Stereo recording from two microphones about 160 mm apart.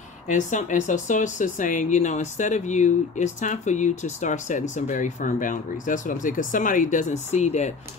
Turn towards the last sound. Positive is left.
turn(degrees=45)  # may be behind; listen again after turning